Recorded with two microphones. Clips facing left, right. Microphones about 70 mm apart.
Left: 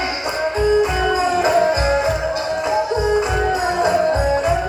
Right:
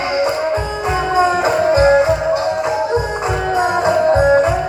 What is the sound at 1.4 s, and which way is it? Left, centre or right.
Music, right.